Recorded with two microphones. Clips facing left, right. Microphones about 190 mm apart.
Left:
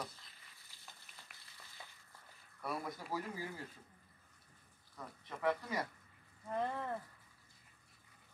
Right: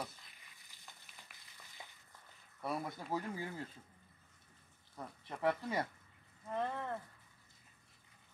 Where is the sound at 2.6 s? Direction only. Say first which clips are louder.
Right 2 dB; 25° right (ahead or behind).